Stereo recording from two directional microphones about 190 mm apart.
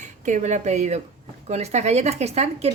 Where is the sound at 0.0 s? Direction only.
40° right (ahead or behind).